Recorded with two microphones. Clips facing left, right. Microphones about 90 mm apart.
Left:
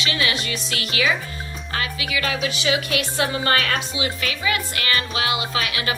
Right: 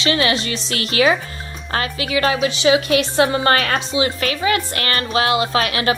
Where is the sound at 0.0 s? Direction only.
35° right (ahead or behind).